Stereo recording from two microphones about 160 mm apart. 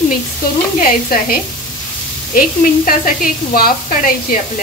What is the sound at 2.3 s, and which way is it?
Speech, 60° left (ahead or behind).